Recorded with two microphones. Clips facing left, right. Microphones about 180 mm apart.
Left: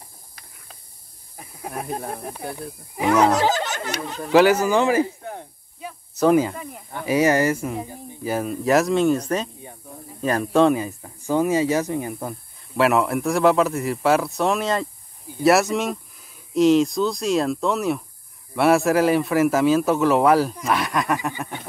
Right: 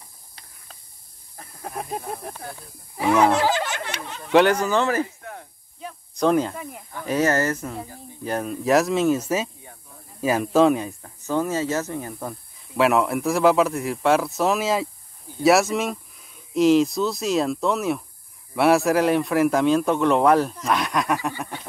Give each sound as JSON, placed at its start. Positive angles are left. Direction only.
{"t": 1.3, "sound": "snake", "side_deg": 10}
{"t": 1.8, "sound": "speech", "side_deg": 0}
{"t": 3.7, "sound": "speech", "side_deg": 40}
{"t": 4.3, "sound": "speech", "side_deg": 5}
{"t": 5.0, "sound": "snake", "side_deg": 30}
{"t": 5.8, "sound": "snake", "side_deg": 5}
{"t": 7.1, "sound": "speech", "side_deg": 10}
{"t": 8.2, "sound": "speech", "side_deg": 5}